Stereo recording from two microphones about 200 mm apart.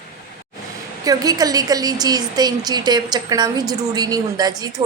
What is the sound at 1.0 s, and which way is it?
A woman's voice, 20° right (ahead or behind).